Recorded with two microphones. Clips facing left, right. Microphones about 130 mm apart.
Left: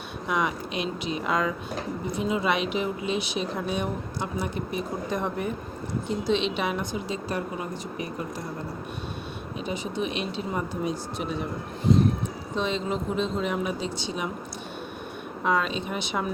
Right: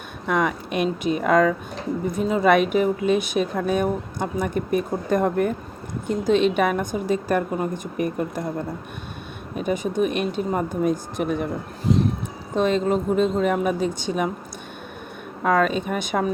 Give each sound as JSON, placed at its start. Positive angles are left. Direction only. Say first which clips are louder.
{"t": 0.3, "sound": "a woman's voice", "louder": "right 5 dB", "side_deg": -50}
{"t": 12.5, "sound": "a woman's voice", "louder": "right 8 dB", "side_deg": -50}
{"t": 15.4, "sound": "a woman's voice", "louder": "right 6 dB", "side_deg": -50}